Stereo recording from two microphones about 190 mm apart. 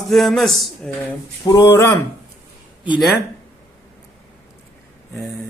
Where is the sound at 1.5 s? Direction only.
15° left (ahead or behind).